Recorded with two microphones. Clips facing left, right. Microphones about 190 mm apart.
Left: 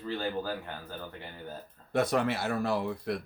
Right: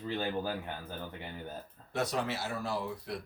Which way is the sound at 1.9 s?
55° left (ahead or behind).